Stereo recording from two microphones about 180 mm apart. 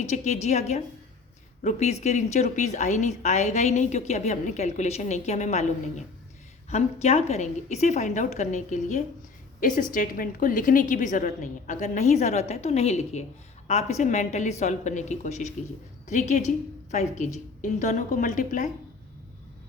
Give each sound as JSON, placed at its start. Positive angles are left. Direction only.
{"t": 0.0, "sound": "a woman's voice", "side_deg": 40}
{"t": 6.7, "sound": "a woman's voice", "side_deg": 35}